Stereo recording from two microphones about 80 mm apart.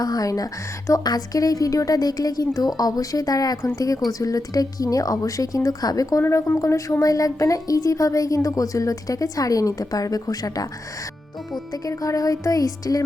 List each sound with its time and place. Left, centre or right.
0.0 s a woman's voice: left
6.2 s a woman's voice: left
11.7 s a woman's voice: left